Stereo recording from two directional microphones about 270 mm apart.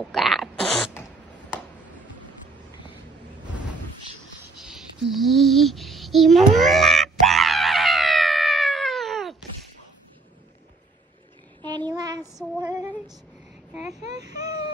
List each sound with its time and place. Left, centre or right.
0.1 s a sound: centre
4.6 s child singing: centre
11.6 s child singing: centre
12.5 s female singing: centre
14.1 s baby cry: centre